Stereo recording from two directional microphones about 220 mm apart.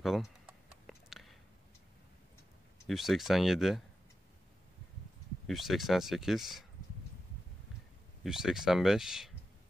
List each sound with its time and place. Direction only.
0.0 s typing: centre (ahead or behind)
2.9 s speech: centre (ahead or behind)
5.5 s speech: centre (ahead or behind)
8.2 s speech: centre (ahead or behind)